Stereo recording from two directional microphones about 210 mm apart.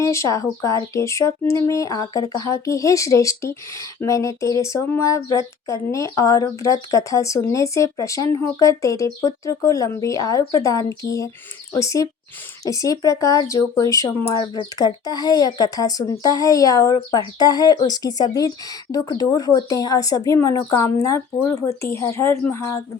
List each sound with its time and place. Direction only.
0.0 s speech: 15° left (ahead or behind)